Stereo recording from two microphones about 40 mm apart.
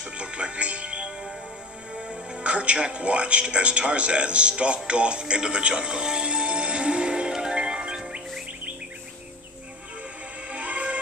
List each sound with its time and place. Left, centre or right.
0.0 s music: right
2.0 s a man's voice: right
5.3 s music: right
10.5 s music: right